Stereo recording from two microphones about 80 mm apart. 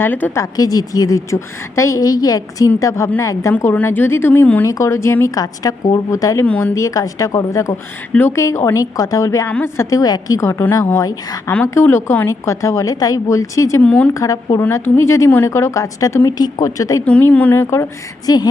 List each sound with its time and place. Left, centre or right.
0.0 s a woman's voice: left
0.3 s a woman's voice: left
3.6 s a woman's voice: left
4.6 s a woman's voice: left
5.2 s a woman's voice: left
13.8 s speech: centre
14.1 s a woman's voice: left
17.1 s a woman's voice: centre
18.3 s a woman's voice: left